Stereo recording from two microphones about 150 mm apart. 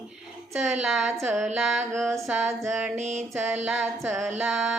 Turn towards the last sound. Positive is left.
turn(degrees=0)  # may be behind; listen again after turning